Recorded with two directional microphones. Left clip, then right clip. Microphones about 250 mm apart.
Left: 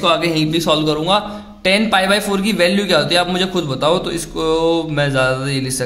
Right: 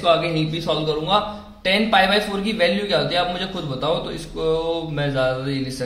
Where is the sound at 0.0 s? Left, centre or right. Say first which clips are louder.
Left 3 dB; left.